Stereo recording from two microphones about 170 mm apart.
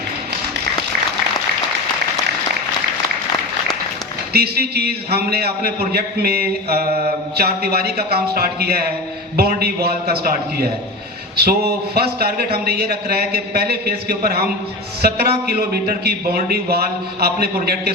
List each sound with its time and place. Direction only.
4.3 s a man's voice: 70° right (ahead or behind)